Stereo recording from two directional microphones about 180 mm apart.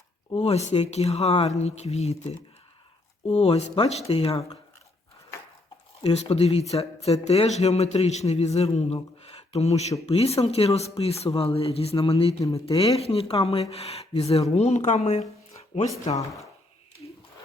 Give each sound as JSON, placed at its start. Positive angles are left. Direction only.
{"t": 0.3, "sound": "speech", "side_deg": 40}
{"t": 6.0, "sound": "speech", "side_deg": 30}